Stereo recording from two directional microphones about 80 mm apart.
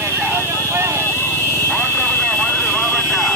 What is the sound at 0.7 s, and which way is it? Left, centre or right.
Vehicle, right.